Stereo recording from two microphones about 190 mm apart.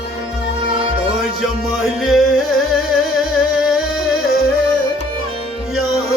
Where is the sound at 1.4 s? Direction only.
Centre (ahead or behind).